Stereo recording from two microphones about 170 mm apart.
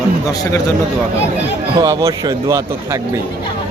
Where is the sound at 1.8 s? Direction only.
20° right (ahead or behind).